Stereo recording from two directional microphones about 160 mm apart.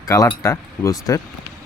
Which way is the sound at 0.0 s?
20° left (ahead or behind).